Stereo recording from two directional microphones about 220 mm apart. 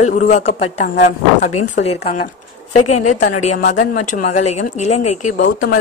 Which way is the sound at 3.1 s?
35° left (ahead or behind).